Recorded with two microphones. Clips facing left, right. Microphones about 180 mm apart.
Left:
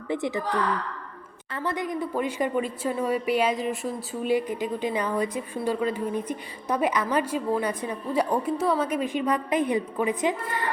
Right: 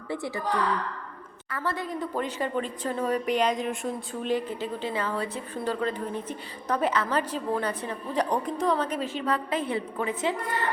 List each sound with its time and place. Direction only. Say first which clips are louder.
0.1 s a woman's voice: left 4 dB; 20° left (ahead or behind)
1.5 s speech: left 2 dB; 20° left (ahead or behind)